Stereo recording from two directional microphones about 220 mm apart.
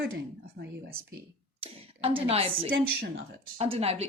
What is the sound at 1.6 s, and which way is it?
A woman's voice, 25° right (ahead or behind).